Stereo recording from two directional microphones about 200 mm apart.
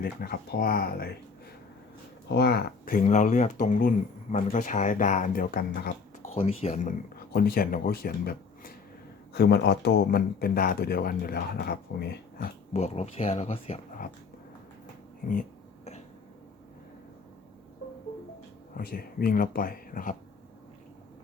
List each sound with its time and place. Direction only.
0.0 s speech: 50° left (ahead or behind)
2.3 s speech: 55° left (ahead or behind)
6.2 s speech: 30° left (ahead or behind)
7.3 s speech: 50° left (ahead or behind)
12.7 s speech: 30° left (ahead or behind)
15.3 s a sound: 40° left (ahead or behind)
18.8 s speech: 45° left (ahead or behind)